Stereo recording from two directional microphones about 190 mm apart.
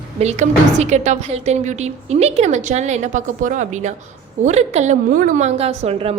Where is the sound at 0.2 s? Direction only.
35° right (ahead or behind).